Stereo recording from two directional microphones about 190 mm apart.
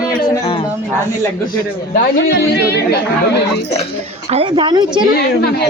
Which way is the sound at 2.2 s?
60° left (ahead or behind).